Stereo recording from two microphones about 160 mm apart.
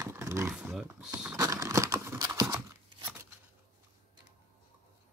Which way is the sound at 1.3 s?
20° right (ahead or behind).